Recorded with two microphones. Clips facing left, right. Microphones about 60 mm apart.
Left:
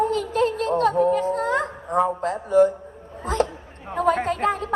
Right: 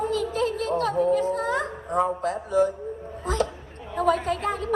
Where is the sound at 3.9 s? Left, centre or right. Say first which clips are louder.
Left 2 dB; left.